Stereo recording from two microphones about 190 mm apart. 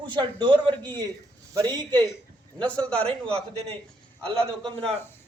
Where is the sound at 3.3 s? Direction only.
30° right (ahead or behind).